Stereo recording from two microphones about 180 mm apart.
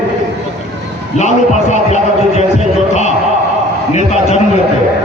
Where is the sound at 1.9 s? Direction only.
40° left (ahead or behind).